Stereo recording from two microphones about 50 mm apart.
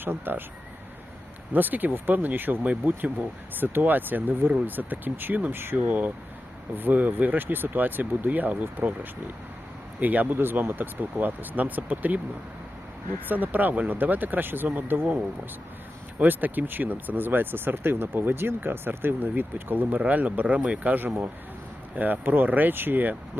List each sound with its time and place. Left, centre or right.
0.0 s speech: right
1.5 s speech: right
13.2 s speech: right
16.1 s speech: right